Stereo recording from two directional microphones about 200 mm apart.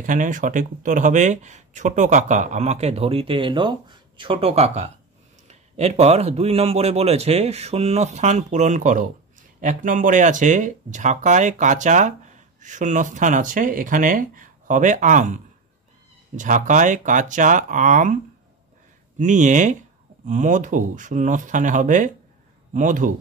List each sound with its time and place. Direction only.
0.0 s speech: 40° right (ahead or behind)